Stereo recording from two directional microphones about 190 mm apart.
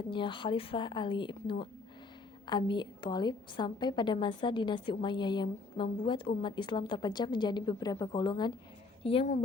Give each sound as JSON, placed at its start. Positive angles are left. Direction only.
{"t": 0.1, "sound": "a woman's voice", "side_deg": 25}
{"t": 9.0, "sound": "speech", "side_deg": 35}